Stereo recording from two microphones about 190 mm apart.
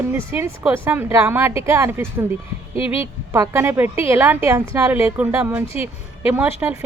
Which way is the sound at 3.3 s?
15° right (ahead or behind).